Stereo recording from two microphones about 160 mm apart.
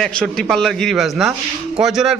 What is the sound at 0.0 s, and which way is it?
Speech, centre (ahead or behind).